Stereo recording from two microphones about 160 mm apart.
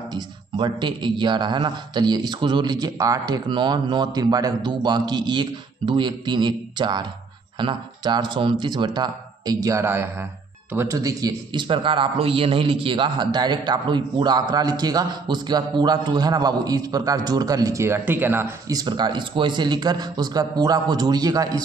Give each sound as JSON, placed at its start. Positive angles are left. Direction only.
{"t": 0.1, "sound": "a man's voice", "side_deg": -30}